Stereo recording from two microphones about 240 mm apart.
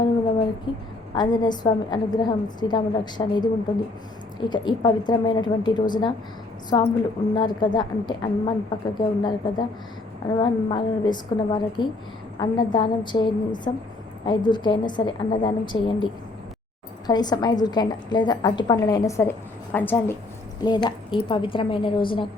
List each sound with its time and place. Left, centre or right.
1.1 s a woman's voice: centre
17.1 s a woman's voice: centre